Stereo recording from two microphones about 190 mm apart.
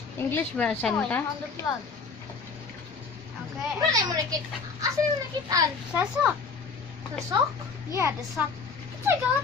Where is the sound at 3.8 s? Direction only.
20° right (ahead or behind).